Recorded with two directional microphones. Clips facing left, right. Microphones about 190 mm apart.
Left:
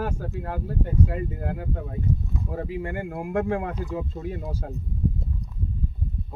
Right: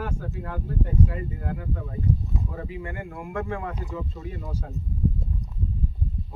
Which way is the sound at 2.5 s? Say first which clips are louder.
Left 5 dB; 45° left (ahead or behind).